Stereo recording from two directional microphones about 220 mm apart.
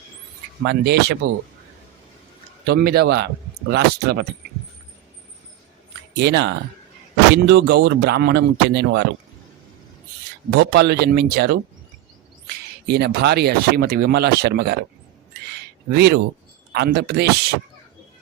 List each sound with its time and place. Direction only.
0.6 s speech: 50° right (ahead or behind)
2.6 s speech: 45° right (ahead or behind)
6.1 s speech: 50° right (ahead or behind)
10.6 s speech: 50° right (ahead or behind)
12.9 s speech: 50° right (ahead or behind)
15.9 s speech: 50° right (ahead or behind)